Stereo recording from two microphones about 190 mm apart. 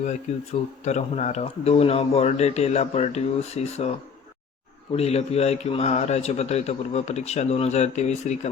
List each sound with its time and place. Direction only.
0.3 s a man's voice: 35° left (ahead or behind)
4.9 s a man's voice: 35° left (ahead or behind)